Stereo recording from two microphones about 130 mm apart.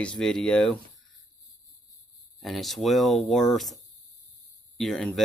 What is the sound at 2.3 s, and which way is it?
Speech, centre (ahead or behind).